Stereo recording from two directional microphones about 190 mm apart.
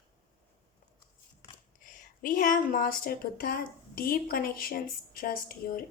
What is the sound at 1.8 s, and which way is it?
A woman's voice, 45° left (ahead or behind).